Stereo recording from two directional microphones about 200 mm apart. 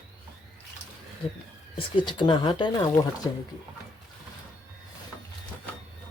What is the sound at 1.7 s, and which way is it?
Speech, 25° left (ahead or behind).